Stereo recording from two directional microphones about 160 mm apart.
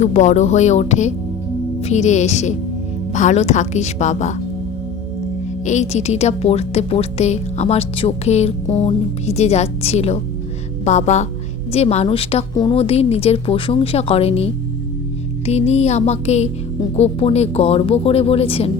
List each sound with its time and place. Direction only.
0.0 s a woman's voice: 45° left (ahead or behind)
5.6 s a woman's voice: 45° left (ahead or behind)